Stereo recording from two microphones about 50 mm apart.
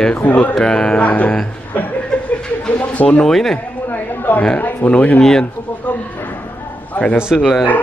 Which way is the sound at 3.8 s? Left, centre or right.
Left.